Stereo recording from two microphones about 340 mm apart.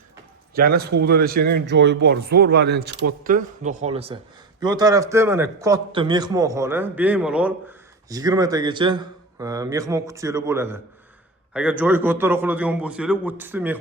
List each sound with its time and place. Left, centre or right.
0.5 s a man's voice: right; by 13.7 s centre